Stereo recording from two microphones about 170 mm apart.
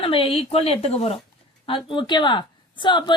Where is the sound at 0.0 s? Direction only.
35° left (ahead or behind).